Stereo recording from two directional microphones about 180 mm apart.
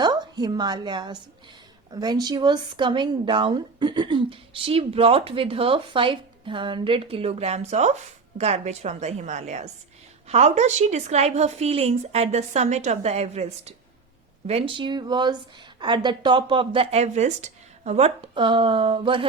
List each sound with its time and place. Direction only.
0.0 s a woman's voice: 25° right (ahead or behind)